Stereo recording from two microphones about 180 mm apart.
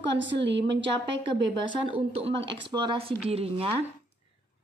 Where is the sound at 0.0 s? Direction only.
85° right.